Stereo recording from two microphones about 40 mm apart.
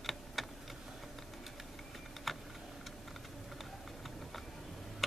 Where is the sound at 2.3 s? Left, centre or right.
Centre.